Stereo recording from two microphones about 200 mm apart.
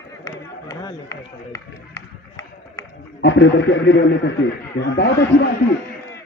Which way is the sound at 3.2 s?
65° left (ahead or behind).